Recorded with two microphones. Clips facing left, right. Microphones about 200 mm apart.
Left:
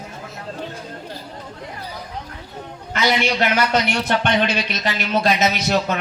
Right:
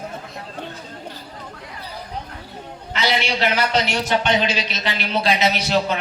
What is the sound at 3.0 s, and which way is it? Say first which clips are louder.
A man's voice: left 3 dB; 50° left (ahead or behind).